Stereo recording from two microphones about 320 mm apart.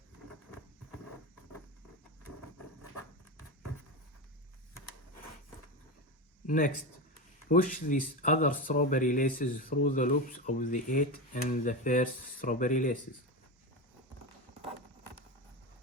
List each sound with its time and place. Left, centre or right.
7.5 s speech: left